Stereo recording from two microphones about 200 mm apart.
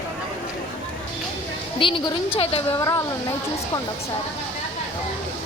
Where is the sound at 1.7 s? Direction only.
25° left (ahead or behind).